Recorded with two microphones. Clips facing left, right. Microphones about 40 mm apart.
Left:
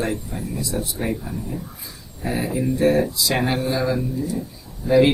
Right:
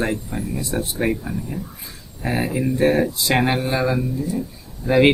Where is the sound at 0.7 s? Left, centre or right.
Right.